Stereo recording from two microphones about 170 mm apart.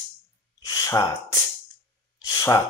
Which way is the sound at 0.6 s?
20° left (ahead or behind).